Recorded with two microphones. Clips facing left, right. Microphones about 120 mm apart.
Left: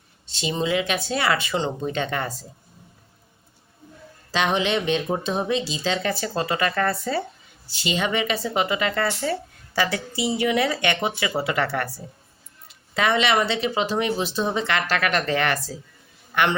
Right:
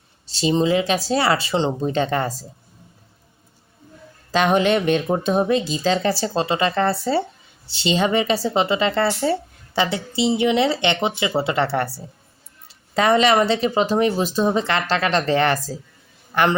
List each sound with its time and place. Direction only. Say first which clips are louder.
0.3 s speech: right 6 dB; 35° right (ahead or behind)
4.3 s a woman's voice: right 5 dB; 50° right (ahead or behind)